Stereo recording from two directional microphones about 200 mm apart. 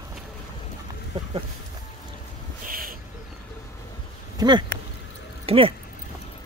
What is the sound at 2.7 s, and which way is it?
Owl, 45° right (ahead or behind).